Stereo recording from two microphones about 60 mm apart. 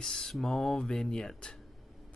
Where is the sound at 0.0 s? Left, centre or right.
Centre.